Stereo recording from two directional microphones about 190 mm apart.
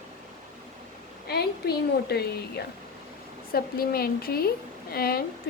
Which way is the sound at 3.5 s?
55° left (ahead or behind).